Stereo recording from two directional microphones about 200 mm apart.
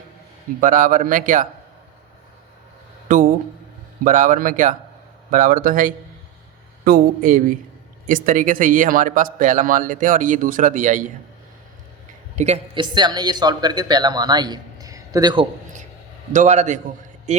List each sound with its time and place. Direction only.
0.6 s speech: 40° right (ahead or behind)
4.0 s speech: 40° right (ahead or behind)
12.4 s speech: 30° right (ahead or behind)
16.3 s speech: 35° right (ahead or behind)